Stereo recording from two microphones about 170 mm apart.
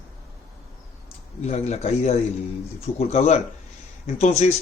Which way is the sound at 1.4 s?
40° left (ahead or behind).